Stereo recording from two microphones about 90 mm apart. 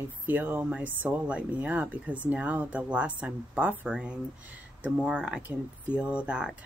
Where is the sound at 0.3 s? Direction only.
20° right (ahead or behind).